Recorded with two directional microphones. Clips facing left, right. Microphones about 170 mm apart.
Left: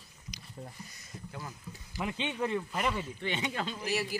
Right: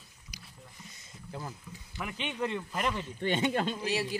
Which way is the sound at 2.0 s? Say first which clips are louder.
Left 3 dB; 20° left (ahead or behind).